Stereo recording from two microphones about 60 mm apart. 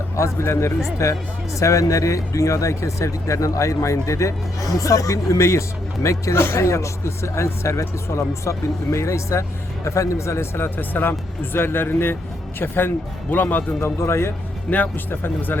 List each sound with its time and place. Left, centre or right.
0.2 s speech: left
6.4 s speech: left
6.7 s a man's voice: left
13.8 s speech: left
14.7 s a man's voice: left